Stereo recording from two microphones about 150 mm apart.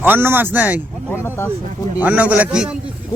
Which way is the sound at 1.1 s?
15° left (ahead or behind).